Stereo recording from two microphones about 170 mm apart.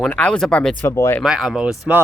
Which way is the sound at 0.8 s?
15° left (ahead or behind).